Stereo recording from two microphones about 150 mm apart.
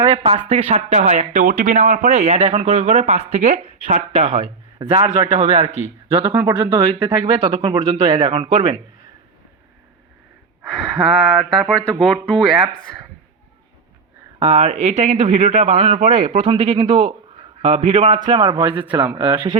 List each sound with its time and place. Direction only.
0.1 s speech: 40° right (ahead or behind)
4.8 s speech: 40° right (ahead or behind)
8.1 s speech: 40° right (ahead or behind)
10.6 s speech: centre (ahead or behind)
14.3 s speech: 45° right (ahead or behind)
16.0 s speech: 55° right (ahead or behind)
16.9 s speech: 45° right (ahead or behind)
18.3 s speech: 30° right (ahead or behind)